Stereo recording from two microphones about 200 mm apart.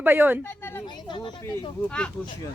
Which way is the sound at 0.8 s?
20° left (ahead or behind).